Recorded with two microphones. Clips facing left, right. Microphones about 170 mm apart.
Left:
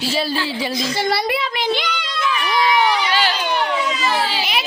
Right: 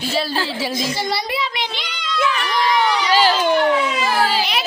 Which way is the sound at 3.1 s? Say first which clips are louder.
Right 5 dB; 40° right (ahead or behind).